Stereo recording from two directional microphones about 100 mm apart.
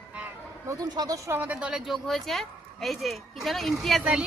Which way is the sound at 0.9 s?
40° right (ahead or behind).